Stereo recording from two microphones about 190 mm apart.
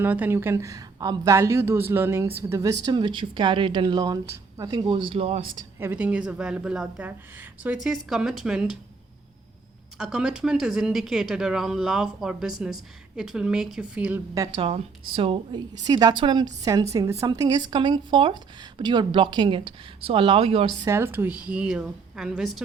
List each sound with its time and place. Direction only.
0.0 s speech: 10° right (ahead or behind); by 5.4 s 30° right (ahead or behind)
5.5 s a woman's voice: 10° right (ahead or behind)
10.0 s speech: 5° right (ahead or behind)
14.3 s speech: 20° right (ahead or behind)
20.8 s a woman's voice: 15° right (ahead or behind)